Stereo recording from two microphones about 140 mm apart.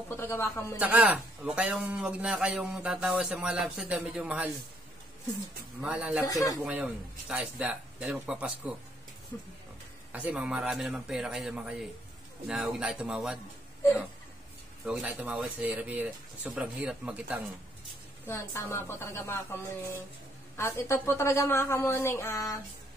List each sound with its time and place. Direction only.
0.1 s a woman's voice: 15° left (ahead or behind)
0.7 s a man's voice: 10° right (ahead or behind)
5.8 s a man's voice: 5° right (ahead or behind)
6.2 s a woman's voice: 25° left (ahead or behind)
6.6 s a man's voice: 5° right (ahead or behind)
10.1 s a man's voice: 10° right (ahead or behind)
14.9 s a man's voice: 5° right (ahead or behind)
18.2 s a woman's voice: 15° left (ahead or behind)